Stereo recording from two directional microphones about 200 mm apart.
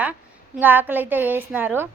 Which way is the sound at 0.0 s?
10° right (ahead or behind).